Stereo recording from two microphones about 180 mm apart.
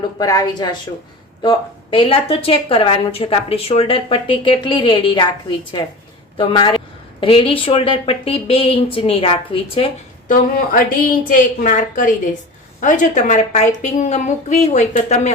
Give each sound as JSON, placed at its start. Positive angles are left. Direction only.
{"t": 0.2, "sound": "a woman's voice", "side_deg": 20}
{"t": 10.2, "sound": "a woman's voice", "side_deg": 50}